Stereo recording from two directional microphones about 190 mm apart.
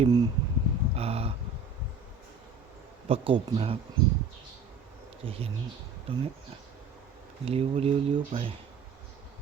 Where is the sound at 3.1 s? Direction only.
30° right (ahead or behind).